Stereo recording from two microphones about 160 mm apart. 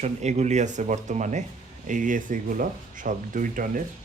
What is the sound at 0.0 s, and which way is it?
Speech, 45° right (ahead or behind).